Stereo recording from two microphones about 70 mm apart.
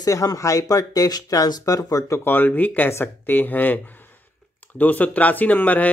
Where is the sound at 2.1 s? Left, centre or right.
Left.